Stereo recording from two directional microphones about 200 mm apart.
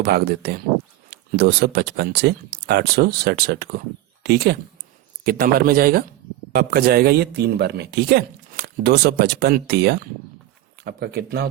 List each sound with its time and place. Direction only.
0.0 s speech: 55° right (ahead or behind)